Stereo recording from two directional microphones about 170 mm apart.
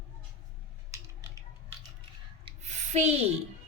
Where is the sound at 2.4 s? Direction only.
45° right (ahead or behind).